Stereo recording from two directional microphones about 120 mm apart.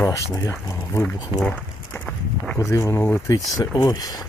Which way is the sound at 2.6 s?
25° left (ahead or behind).